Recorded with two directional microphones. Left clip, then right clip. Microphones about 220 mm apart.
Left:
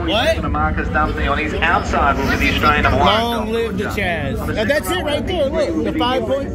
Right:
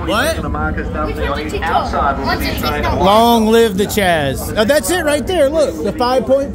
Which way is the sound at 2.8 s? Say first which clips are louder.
Right 3 dB; 50° right (ahead or behind).